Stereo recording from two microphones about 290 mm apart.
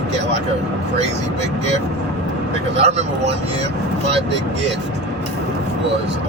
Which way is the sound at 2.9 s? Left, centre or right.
Right.